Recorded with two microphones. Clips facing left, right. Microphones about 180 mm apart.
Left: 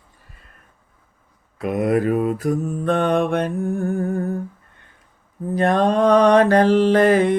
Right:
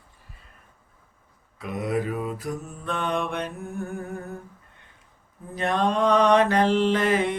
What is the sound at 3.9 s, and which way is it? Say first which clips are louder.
Humming: left 11 dB; 35° left (ahead or behind).